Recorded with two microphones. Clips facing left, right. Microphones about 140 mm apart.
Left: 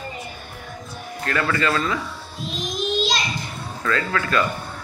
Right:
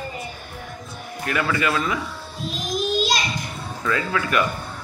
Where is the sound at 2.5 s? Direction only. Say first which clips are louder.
Right 1 dB; 5° right (ahead or behind).